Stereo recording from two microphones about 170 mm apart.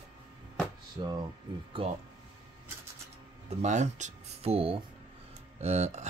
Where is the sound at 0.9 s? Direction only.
25° right (ahead or behind).